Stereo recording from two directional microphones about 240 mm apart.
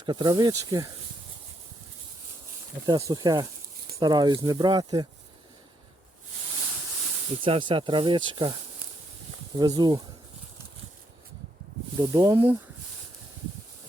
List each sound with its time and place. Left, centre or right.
0.0 s speech: centre
2.8 s speech: centre
7.4 s speech: right
9.6 s speech: centre
11.9 s speech: centre